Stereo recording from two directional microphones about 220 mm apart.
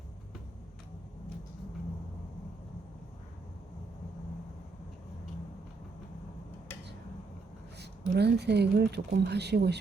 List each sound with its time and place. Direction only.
7.8 s speech: 50° right (ahead or behind)